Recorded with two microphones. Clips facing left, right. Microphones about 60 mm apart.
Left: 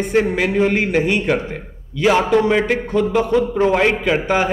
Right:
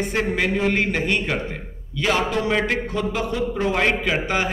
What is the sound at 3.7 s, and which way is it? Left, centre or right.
Speech, centre.